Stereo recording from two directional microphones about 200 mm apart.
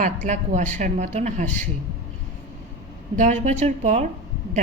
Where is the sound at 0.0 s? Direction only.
40° right (ahead or behind).